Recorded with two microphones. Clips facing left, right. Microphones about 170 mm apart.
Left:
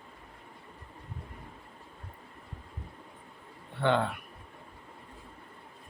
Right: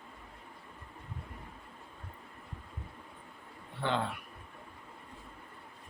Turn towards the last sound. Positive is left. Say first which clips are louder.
# left 6 dB
turn(degrees=60)  # may be behind; listen again after turning